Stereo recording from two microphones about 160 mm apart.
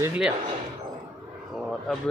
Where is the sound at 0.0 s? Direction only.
10° right (ahead or behind).